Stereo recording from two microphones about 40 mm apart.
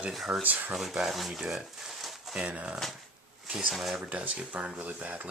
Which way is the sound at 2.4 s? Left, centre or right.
Right.